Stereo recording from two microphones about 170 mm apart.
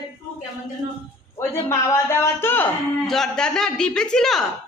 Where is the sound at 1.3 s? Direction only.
15° left (ahead or behind).